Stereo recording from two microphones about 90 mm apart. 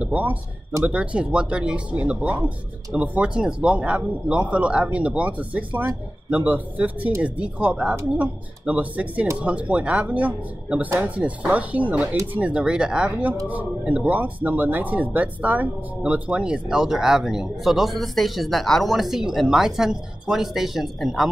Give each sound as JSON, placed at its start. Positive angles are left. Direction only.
{"t": 0.0, "sound": "speech", "side_deg": -15}